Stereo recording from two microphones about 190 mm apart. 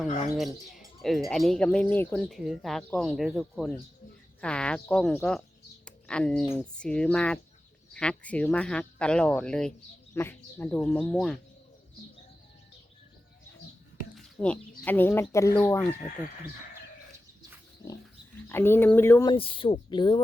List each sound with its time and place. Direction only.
0.3 s speech: centre (ahead or behind)
14.2 s a sound: 5° left (ahead or behind)
14.8 s speech: 10° left (ahead or behind)
18.4 s speech: 10° left (ahead or behind)
19.3 s speech: 25° left (ahead or behind)